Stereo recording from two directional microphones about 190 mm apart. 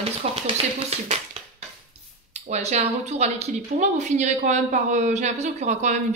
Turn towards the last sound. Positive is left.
turn(degrees=-40)  # may be behind; listen again after turning